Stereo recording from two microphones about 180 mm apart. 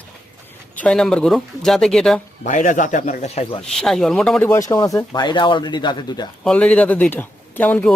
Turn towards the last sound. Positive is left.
turn(degrees=10)  # may be behind; listen again after turning